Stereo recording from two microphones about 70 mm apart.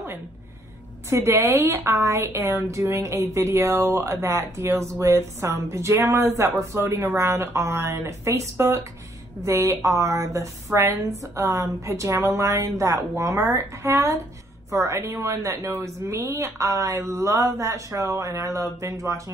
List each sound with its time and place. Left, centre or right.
1.1 s a woman's voice: right